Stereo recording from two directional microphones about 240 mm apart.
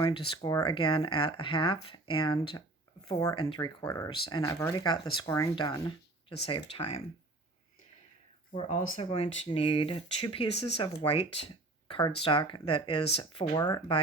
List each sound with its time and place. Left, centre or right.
0.0 s speech: centre
8.5 s speech: left